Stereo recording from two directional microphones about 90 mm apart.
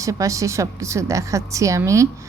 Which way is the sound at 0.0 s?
35° right (ahead or behind).